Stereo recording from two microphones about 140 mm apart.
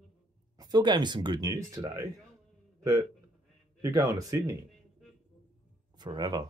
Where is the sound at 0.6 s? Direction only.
30° right (ahead or behind).